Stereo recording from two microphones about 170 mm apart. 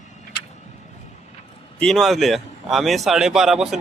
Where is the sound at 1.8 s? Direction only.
Centre (ahead or behind).